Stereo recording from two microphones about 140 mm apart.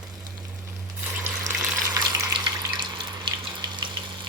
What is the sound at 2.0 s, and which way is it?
Water, 30° right (ahead or behind).